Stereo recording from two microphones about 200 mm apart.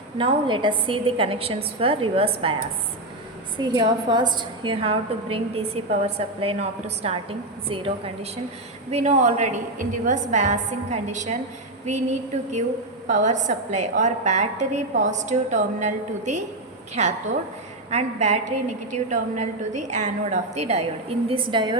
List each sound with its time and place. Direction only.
0.2 s a woman's voice: 25° right (ahead or behind)
3.6 s a woman's voice: 20° right (ahead or behind); by 11.3 s 35° right (ahead or behind)
13.1 s a woman's voice: 40° right (ahead or behind); by 21.8 s 20° right (ahead or behind)